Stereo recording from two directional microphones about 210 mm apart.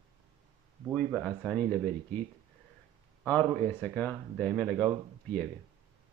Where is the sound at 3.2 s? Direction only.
10° left (ahead or behind).